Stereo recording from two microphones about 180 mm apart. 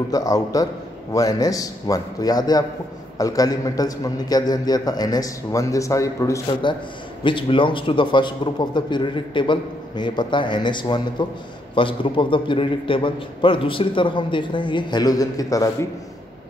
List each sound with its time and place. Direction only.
0.1 s a man's voice: 20° left (ahead or behind)
7.2 s a man's voice: 30° left (ahead or behind)